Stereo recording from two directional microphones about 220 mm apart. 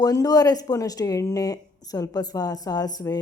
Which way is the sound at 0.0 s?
15° left (ahead or behind).